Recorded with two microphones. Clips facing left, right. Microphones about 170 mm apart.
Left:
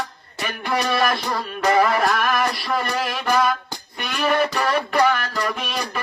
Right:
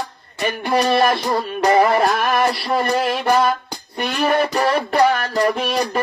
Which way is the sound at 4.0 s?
35° right (ahead or behind).